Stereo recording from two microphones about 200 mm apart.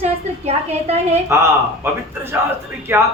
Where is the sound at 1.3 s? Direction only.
15° right (ahead or behind).